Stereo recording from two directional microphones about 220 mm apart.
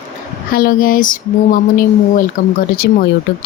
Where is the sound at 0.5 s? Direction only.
40° left (ahead or behind).